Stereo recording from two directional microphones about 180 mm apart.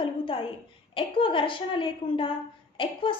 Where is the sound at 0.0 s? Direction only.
30° left (ahead or behind).